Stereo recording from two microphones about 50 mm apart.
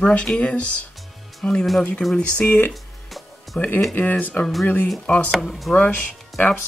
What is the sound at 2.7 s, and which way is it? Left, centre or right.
Music, centre.